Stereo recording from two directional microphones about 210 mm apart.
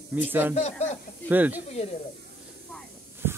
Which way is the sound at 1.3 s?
10° right (ahead or behind).